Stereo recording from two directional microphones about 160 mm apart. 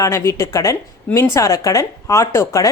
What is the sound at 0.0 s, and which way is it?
Speech, 15° left (ahead or behind).